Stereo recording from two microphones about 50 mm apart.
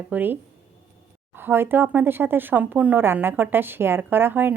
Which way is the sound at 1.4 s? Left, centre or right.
Right.